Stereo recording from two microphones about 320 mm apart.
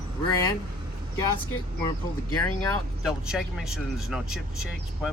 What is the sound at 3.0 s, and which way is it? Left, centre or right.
Speech, centre.